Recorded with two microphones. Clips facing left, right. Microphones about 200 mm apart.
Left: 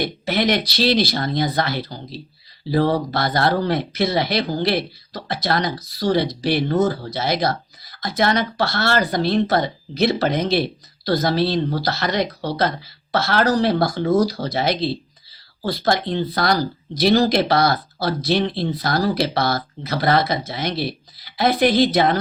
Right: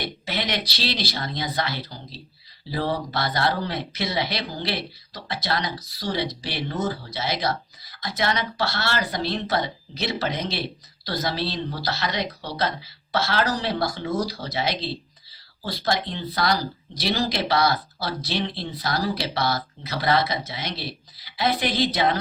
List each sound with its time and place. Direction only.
0.0 s speech: 50° left (ahead or behind)